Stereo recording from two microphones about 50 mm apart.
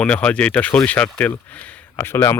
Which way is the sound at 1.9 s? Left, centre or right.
Left.